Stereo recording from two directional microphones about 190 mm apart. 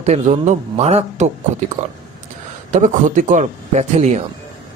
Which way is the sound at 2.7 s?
40° right (ahead or behind).